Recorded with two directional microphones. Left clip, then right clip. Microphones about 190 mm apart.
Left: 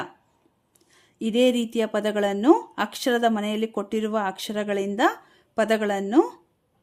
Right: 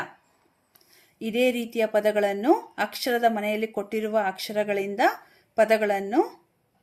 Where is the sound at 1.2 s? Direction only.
50° left (ahead or behind).